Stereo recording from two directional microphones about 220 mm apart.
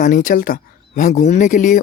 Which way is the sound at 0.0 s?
35° left (ahead or behind).